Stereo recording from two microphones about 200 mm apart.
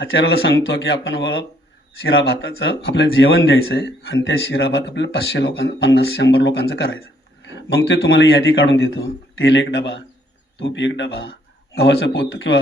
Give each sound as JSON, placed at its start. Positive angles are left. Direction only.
{"t": 0.0, "sound": "speech", "side_deg": 70}
{"t": 0.7, "sound": "speech", "side_deg": 60}
{"t": 3.8, "sound": "speech", "side_deg": 55}